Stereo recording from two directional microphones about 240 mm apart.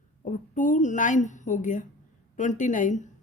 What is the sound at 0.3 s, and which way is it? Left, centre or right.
Speech, left.